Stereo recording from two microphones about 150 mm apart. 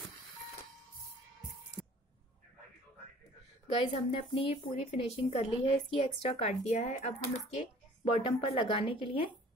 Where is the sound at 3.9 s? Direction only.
40° left (ahead or behind).